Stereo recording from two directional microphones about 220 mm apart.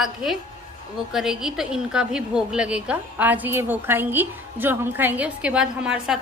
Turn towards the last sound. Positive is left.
turn(degrees=-5)  # may be behind; listen again after turning